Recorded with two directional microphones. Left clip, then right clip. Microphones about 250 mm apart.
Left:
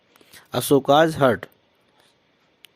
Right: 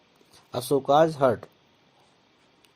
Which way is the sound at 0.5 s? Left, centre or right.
Left.